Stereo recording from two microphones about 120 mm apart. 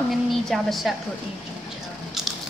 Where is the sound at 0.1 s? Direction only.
Centre (ahead or behind).